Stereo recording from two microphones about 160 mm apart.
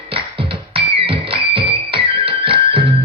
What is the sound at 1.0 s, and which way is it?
Music, 35° right (ahead or behind).